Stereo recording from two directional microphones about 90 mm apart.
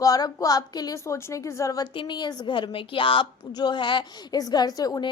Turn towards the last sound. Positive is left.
turn(degrees=45)  # may be behind; listen again after turning